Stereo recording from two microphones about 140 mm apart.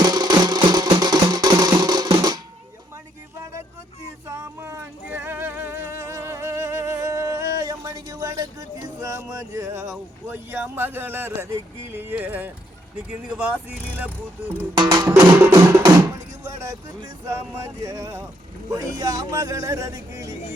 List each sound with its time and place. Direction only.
0.0 s music: 30° right (ahead or behind)
4.3 s music: 20° right (ahead or behind)
10.2 s a sound: 15° right (ahead or behind)
13.1 s speech: 5° right (ahead or behind)
14.8 s music: 30° right (ahead or behind)
15.0 s speech: 10° right (ahead or behind)
15.8 s music: 25° right (ahead or behind)
18.7 s speech: 25° right (ahead or behind)